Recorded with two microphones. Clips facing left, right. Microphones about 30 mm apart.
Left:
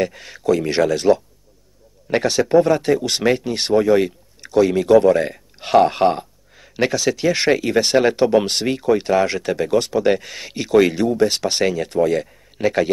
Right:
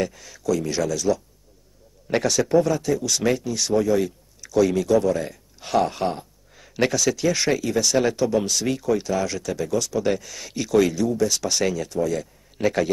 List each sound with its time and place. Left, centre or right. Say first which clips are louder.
0.1 s speech: left 5 dB; left
2.2 s speech: left 4 dB; left
2.6 s speech: left 6 dB; left
3.7 s a sound: left 6 dB; left
4.6 s speech: left 4 dB; left
4.8 s speech: left 7 dB; left
6.5 s a sound: left 2 dB; centre
7.0 s speech: left 3 dB; left
8.6 s speech: left 5 dB; left
10.9 s speech: left 5 dB; left
11.9 s speech: left 6 dB; left
12.5 s a man's voice: left 3 dB; centre